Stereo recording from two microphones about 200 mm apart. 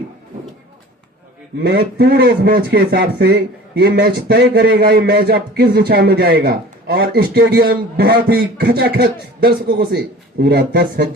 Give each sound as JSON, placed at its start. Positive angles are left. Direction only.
{"t": 1.6, "sound": "speech", "side_deg": -50}